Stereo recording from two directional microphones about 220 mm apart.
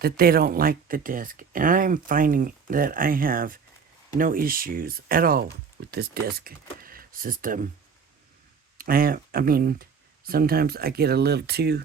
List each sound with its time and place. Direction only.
0.0 s speech: 45° right (ahead or behind)
8.8 s speech: 40° right (ahead or behind)